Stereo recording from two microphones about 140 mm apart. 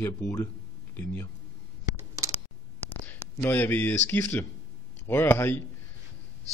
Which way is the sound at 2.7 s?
15° left (ahead or behind).